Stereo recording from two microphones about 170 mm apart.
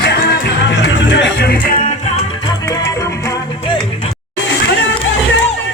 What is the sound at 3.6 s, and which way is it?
Music, 30° left (ahead or behind).